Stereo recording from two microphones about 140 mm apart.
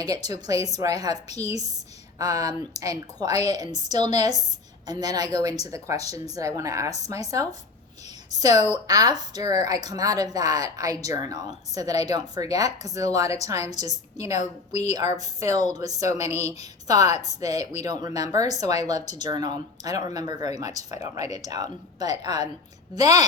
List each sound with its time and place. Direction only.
0.0 s a woman's voice: 25° right (ahead or behind)
3.3 s a woman's voice: 50° left (ahead or behind)
3.6 s a woman's voice: 30° right (ahead or behind)
8.5 s a woman's voice: 55° left (ahead or behind)
8.9 s a woman's voice: 25° right (ahead or behind)
14.3 s a woman's voice: 55° left (ahead or behind)
14.9 s a woman's voice: 25° right (ahead or behind)